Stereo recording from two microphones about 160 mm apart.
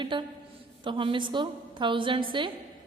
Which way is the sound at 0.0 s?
30° right (ahead or behind).